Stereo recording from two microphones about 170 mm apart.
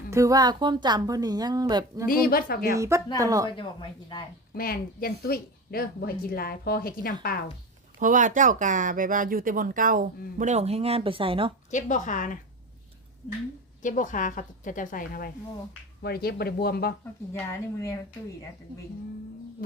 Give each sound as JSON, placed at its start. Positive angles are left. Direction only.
{"t": 0.1, "sound": "speech", "side_deg": -20}
{"t": 2.0, "sound": "a woman's voice", "side_deg": 60}
{"t": 2.7, "sound": "speech", "side_deg": -20}
{"t": 3.5, "sound": "speech", "side_deg": 30}
{"t": 4.5, "sound": "a woman's voice", "side_deg": 60}
{"t": 7.9, "sound": "speech", "side_deg": -50}
{"t": 11.7, "sound": "a woman's voice", "side_deg": 45}
{"t": 13.8, "sound": "a woman's voice", "side_deg": 50}
{"t": 16.0, "sound": "a woman's voice", "side_deg": 65}